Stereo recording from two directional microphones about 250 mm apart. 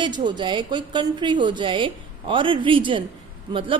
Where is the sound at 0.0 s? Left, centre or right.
Centre.